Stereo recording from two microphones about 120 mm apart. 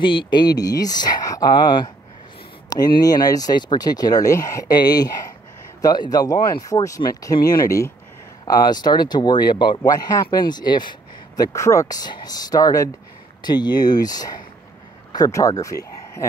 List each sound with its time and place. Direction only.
0.0 s speech: 40° left (ahead or behind)
2.7 s speech: 35° left (ahead or behind)